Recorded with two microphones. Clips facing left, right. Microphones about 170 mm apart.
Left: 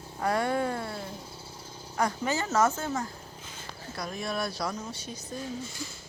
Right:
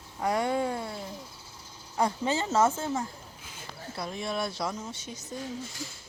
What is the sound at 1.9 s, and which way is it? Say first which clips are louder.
Speech: right 1 dB; 25° right (ahead or behind).